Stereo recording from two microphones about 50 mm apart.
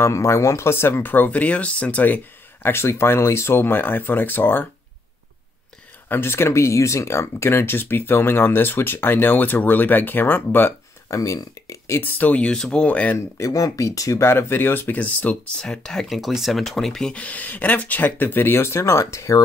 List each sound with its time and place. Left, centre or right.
0.0 s speech: left
2.6 s speech: left
6.0 s speech: left
11.1 s speech: left
12.0 s speech: left
12.4 s speech: centre
12.8 s speech: left
13.4 s speech: left
14.3 s speech: left
15.6 s speech: centre
16.1 s speech: centre
17.1 s speech: left